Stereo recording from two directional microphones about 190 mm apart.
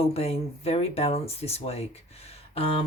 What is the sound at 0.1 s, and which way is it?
Speech, 30° left (ahead or behind).